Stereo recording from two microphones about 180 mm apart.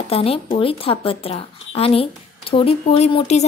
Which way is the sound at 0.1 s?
30° left (ahead or behind).